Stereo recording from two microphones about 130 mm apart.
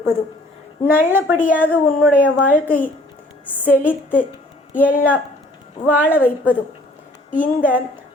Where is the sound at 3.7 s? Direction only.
15° left (ahead or behind).